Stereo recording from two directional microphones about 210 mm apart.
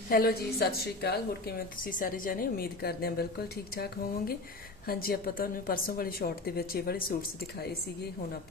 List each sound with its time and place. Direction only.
0.1 s a woman's voice: 45° left (ahead or behind)